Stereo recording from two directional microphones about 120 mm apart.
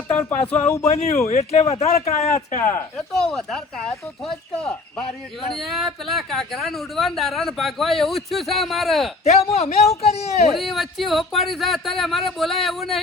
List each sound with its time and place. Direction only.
0.3 s speech: 75° left (ahead or behind)
1.3 s a man's voice: 65° left (ahead or behind)
2.6 s speech: 90° left
3.1 s speech: 5° left (ahead or behind)
9.2 s a man's voice: 60° left (ahead or behind)
10.5 s speech: centre (ahead or behind)